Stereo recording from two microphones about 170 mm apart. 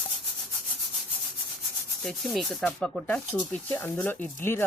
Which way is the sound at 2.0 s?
Centre (ahead or behind).